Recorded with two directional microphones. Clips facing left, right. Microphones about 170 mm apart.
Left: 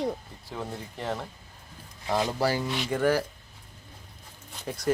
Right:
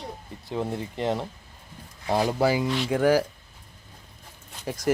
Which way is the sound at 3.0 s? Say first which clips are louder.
Right 4 dB; 10° right (ahead or behind).